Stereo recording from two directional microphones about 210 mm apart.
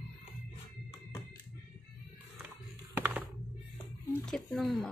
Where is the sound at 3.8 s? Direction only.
5° left (ahead or behind).